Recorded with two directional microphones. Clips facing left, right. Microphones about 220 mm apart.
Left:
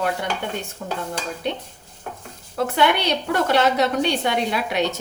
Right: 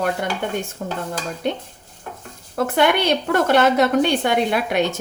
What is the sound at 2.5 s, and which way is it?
A woman's voice, 50° right (ahead or behind).